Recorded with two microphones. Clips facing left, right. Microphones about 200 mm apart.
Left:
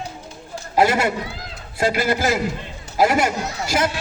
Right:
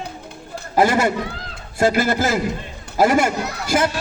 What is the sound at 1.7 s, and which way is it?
A man's voice, 45° right (ahead or behind).